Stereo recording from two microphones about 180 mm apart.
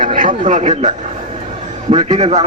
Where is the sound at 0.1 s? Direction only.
45° right (ahead or behind).